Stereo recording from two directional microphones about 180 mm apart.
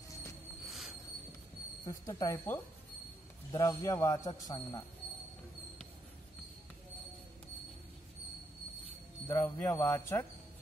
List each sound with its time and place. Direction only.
0.6 s music: centre (ahead or behind)
1.9 s a man's voice: 20° left (ahead or behind)
9.2 s speech: 10° left (ahead or behind)